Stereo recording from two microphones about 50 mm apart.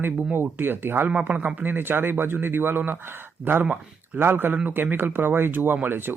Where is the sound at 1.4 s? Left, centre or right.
Right.